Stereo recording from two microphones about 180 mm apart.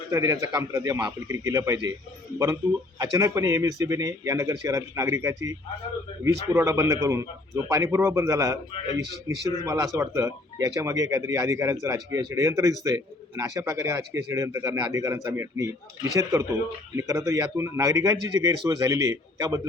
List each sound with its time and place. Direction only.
0.1 s a man's voice: 20° right (ahead or behind)
3.0 s a man's voice: 20° right (ahead or behind)
17.0 s a man's voice: 15° right (ahead or behind)